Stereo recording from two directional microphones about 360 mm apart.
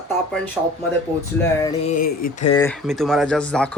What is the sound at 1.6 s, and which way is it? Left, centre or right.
Speech, centre.